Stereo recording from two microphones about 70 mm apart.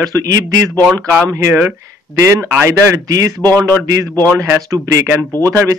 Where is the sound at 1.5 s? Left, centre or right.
Right.